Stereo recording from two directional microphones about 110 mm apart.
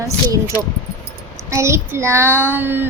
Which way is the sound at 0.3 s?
25° right (ahead or behind).